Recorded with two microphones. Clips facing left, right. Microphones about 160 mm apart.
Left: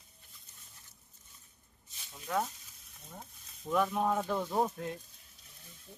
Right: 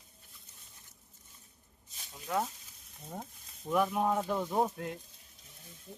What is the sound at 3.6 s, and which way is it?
Speech, 5° right (ahead or behind).